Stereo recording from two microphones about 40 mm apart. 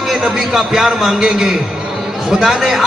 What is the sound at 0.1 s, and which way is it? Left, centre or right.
A man's voice, centre.